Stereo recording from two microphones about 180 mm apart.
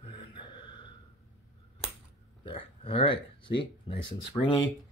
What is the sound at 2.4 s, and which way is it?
Speech, 30° left (ahead or behind).